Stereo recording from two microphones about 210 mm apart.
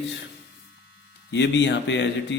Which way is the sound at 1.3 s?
55° left (ahead or behind).